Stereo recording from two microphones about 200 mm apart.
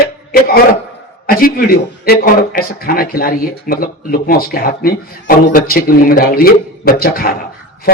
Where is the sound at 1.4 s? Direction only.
45° left (ahead or behind).